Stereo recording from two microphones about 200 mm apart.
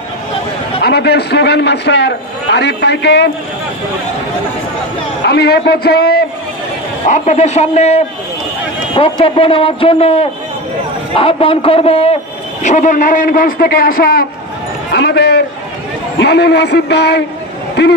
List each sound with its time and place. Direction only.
0.8 s a man's voice: 55° left (ahead or behind)
5.2 s a man's voice: 55° left (ahead or behind)
7.1 s a man's voice: 35° left (ahead or behind); by 17.2 s 55° left (ahead or behind)